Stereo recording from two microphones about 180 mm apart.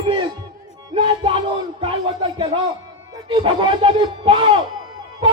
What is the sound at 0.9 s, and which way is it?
Music, 30° right (ahead or behind).